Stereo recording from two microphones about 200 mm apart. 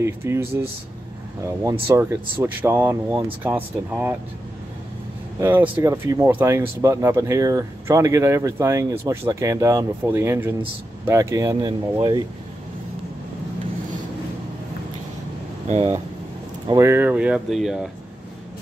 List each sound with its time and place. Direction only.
0.0 s speech: 10° right (ahead or behind)
5.4 s speech: 10° right (ahead or behind)
16.6 s speech: 15° right (ahead or behind)